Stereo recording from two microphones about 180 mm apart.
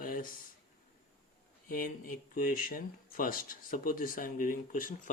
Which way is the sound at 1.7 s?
50° left (ahead or behind).